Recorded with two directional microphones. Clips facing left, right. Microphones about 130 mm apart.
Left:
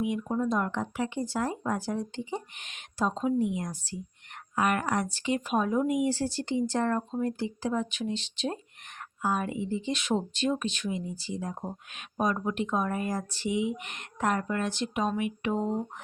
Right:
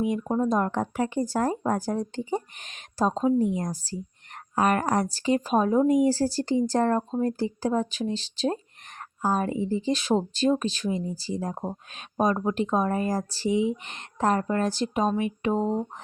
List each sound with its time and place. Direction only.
0.0 s speech: 40° right (ahead or behind)